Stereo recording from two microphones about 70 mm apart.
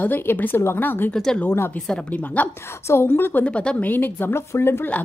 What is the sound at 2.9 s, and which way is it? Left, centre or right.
Speech, left.